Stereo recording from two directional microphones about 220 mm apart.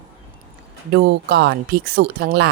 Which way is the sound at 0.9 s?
45° right (ahead or behind).